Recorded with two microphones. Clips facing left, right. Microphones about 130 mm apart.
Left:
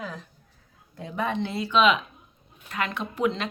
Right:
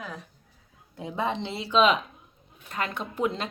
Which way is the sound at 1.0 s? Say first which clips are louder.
Left 1 dB; 20° right (ahead or behind).